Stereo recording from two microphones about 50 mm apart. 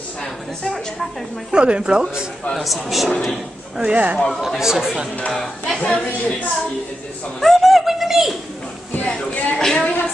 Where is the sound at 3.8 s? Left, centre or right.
Right.